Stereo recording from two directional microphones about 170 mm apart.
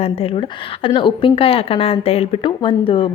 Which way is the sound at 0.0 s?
35° left (ahead or behind).